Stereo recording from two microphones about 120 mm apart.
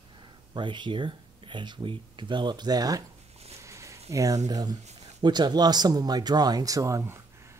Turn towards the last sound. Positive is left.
turn(degrees=-25)  # may be behind; listen again after turning